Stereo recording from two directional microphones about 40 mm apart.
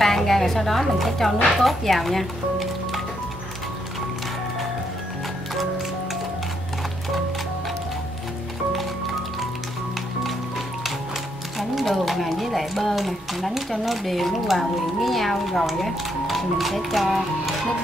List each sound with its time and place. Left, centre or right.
0.0 s a woman's voice: centre
11.8 s speech: centre